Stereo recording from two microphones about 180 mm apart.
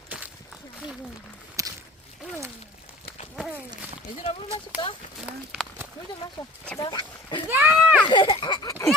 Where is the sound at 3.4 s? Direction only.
5° right (ahead or behind).